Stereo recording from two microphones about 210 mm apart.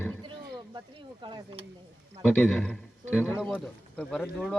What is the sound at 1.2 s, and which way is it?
Speech, 20° right (ahead or behind).